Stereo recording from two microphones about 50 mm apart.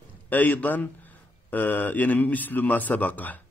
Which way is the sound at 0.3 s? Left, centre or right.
Left.